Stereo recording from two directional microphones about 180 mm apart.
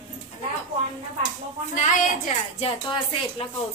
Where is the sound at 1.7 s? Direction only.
45° left (ahead or behind).